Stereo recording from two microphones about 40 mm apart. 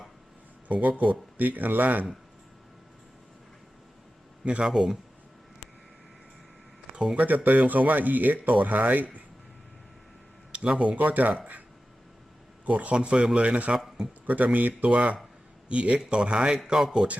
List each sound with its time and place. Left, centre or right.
0.7 s speech: right
4.6 s speech: centre
6.9 s speech: right
7.3 s speech: right
10.5 s speech: right
10.9 s speech: right
12.6 s a man's voice: right
13.7 s a man's voice: centre
14.3 s speech: right
14.8 s a man's voice: right
16.6 s speech: centre